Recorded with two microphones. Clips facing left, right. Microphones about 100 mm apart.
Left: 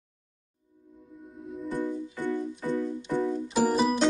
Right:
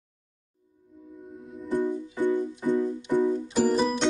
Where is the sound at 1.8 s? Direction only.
15° right (ahead or behind).